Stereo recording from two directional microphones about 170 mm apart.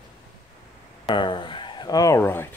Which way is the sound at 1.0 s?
30° left (ahead or behind).